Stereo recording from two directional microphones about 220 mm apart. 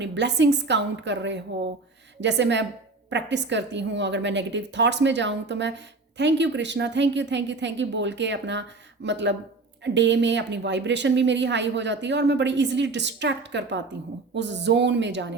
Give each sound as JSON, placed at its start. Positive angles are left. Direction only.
{"t": 0.0, "sound": "a woman's voice", "side_deg": -50}